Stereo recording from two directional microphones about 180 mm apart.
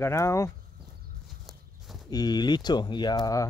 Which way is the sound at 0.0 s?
15° left (ahead or behind).